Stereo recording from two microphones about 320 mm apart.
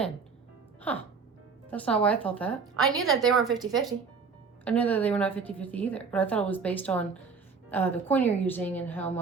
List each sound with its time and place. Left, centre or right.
0.9 s a woman's voice: centre
4.6 s a woman's voice: centre